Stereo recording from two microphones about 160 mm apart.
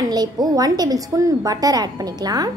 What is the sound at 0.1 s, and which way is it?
A woman's voice, 25° right (ahead or behind).